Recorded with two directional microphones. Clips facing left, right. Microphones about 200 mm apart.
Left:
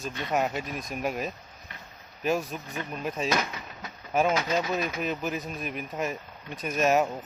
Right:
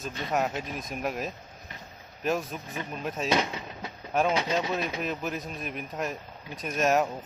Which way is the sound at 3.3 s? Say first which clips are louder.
Right 2 dB; 25° right (ahead or behind).